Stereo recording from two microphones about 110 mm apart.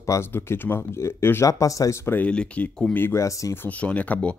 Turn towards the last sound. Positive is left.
turn(degrees=15)  # may be behind; listen again after turning